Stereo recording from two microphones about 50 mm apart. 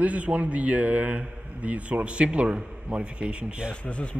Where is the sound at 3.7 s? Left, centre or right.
Left.